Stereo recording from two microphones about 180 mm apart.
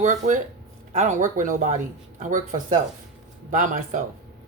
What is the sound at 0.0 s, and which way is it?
Speech, 45° right (ahead or behind).